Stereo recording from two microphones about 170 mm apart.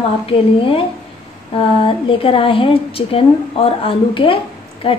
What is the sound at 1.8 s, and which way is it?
A woman's voice, 30° left (ahead or behind).